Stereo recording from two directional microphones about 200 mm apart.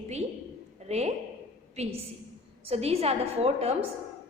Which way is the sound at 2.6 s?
30° right (ahead or behind).